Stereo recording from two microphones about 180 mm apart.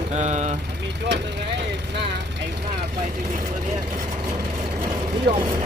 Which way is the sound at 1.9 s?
70° right (ahead or behind).